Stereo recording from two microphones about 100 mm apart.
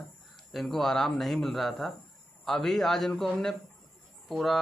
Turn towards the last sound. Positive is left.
turn(degrees=0)  # may be behind; listen again after turning